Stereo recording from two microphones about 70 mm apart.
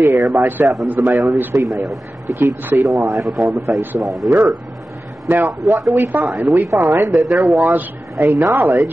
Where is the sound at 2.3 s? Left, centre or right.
Right.